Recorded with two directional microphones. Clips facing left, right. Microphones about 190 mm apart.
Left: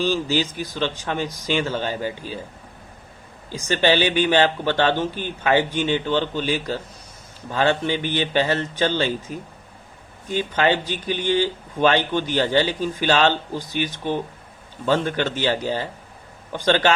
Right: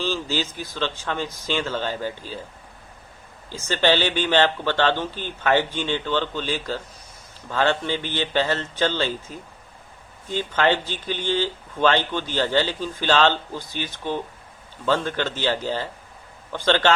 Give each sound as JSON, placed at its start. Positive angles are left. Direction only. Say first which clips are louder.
{"t": 0.0, "sound": "speech", "louder": "left 4 dB", "side_deg": 15}
{"t": 3.5, "sound": "speech", "louder": "left 1 dB", "side_deg": 15}